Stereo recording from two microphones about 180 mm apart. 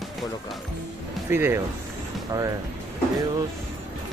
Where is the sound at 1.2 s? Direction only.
15° right (ahead or behind).